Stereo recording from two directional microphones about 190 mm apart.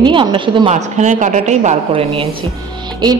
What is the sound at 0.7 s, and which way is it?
A woman's voice, 40° right (ahead or behind).